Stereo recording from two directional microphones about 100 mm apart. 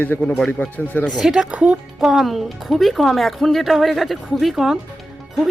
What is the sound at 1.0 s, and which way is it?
Speech, centre (ahead or behind).